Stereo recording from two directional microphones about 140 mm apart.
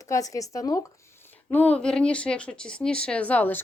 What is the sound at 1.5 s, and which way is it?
Speech, 10° left (ahead or behind).